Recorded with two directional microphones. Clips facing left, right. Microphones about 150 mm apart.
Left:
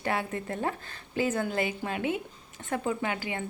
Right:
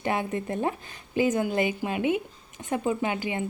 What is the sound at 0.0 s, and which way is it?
A woman's voice, 20° right (ahead or behind).